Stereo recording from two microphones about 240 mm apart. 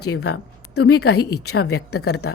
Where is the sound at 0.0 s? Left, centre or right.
Left.